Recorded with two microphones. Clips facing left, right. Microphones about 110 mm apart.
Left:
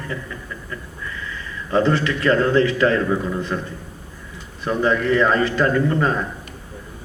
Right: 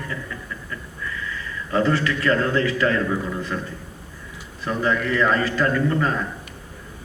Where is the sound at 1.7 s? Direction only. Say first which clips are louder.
Left 2 dB; 25° left (ahead or behind).